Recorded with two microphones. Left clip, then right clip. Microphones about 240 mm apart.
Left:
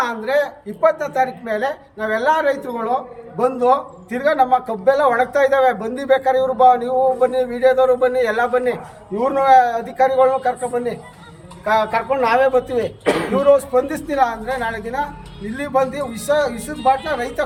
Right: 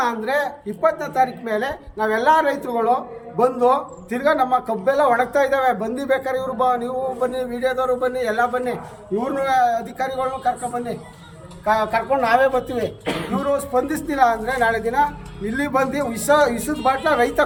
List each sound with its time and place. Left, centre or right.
0.0 s a woman's voice: centre
13.1 s a woman's voice: centre